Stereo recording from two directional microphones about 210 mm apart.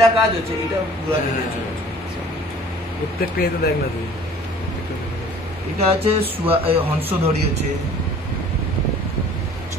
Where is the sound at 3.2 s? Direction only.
45° left (ahead or behind).